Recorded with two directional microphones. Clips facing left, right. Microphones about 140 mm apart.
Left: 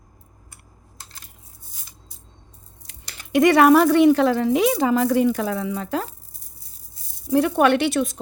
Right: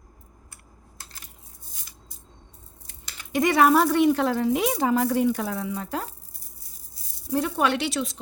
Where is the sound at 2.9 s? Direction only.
70° left (ahead or behind); by 6.0 s 90° left.